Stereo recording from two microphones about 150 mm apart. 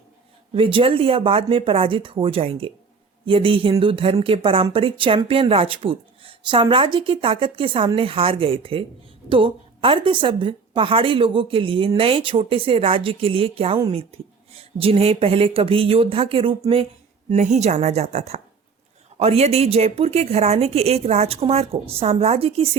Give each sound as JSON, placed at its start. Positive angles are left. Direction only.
{"t": 0.5, "sound": "a woman's voice", "side_deg": -35}
{"t": 17.2, "sound": "a woman's voice", "side_deg": -50}